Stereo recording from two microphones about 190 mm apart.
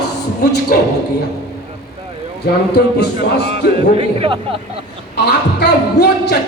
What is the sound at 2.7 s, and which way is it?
Speech, 60° left (ahead or behind).